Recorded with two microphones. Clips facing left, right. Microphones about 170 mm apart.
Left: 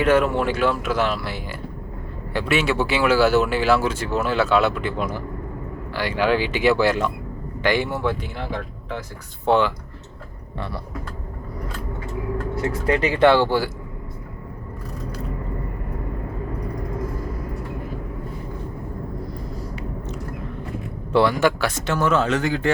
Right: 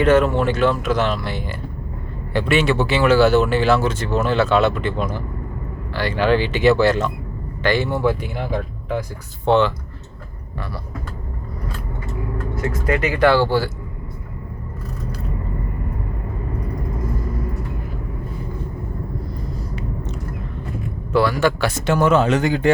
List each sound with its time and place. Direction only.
0.0 s speech: 10° left (ahead or behind)
9.5 s speech: 10° left (ahead or behind)
12.5 s speech: 30° left (ahead or behind)
21.1 s speech: 20° left (ahead or behind)
21.8 s speech: 15° right (ahead or behind)